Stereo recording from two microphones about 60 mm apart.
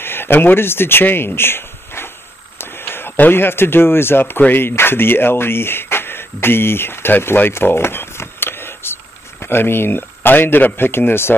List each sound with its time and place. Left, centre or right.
0.0 s speech: left